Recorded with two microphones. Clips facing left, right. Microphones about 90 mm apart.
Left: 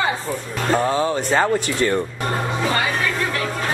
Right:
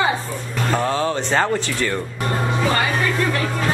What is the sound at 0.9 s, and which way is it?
Speech, 20° left (ahead or behind).